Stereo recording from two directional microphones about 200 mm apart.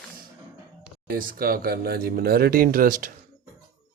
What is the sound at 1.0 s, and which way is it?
Speech, 45° right (ahead or behind).